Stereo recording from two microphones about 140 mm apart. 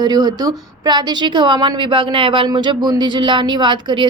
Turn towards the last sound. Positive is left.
turn(degrees=-35)  # may be behind; listen again after turning